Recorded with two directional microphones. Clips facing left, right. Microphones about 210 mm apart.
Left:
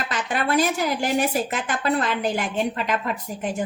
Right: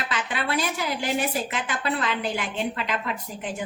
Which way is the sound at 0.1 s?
45° left (ahead or behind).